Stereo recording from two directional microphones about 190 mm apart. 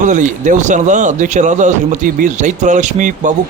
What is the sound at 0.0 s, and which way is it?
Speech, 40° right (ahead or behind).